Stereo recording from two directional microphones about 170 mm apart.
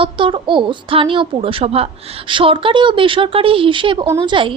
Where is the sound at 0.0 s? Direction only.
30° right (ahead or behind).